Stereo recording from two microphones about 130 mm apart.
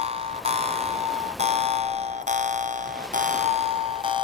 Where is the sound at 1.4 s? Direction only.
55° right (ahead or behind).